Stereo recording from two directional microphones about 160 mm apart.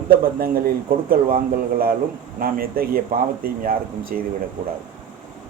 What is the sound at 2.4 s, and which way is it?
A man's voice, 60° right (ahead or behind).